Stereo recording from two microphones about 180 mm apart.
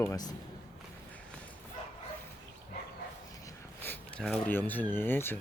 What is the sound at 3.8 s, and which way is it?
Speech, 10° left (ahead or behind).